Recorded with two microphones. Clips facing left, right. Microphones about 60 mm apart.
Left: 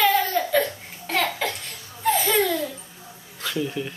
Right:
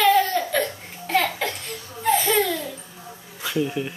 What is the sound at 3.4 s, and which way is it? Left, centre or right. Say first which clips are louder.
Speech: right 2 dB; centre.